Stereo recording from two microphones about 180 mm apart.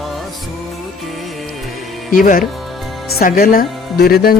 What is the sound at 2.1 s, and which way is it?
Speech, 50° left (ahead or behind).